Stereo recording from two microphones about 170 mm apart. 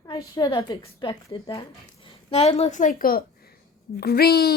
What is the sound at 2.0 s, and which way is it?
A woman's voice, 35° left (ahead or behind).